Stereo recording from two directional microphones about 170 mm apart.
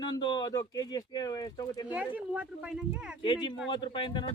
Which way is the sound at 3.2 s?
25° left (ahead or behind).